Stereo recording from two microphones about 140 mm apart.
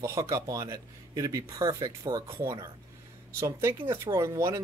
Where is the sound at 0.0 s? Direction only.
20° right (ahead or behind).